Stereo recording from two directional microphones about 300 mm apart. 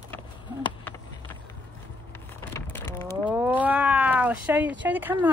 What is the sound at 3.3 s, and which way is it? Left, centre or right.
Cat, centre.